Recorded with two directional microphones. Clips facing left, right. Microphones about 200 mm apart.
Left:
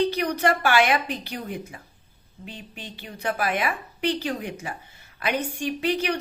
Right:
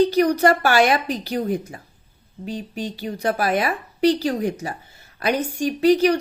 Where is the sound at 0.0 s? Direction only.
40° right (ahead or behind).